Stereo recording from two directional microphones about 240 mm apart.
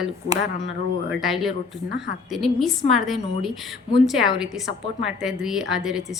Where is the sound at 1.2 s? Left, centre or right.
Centre.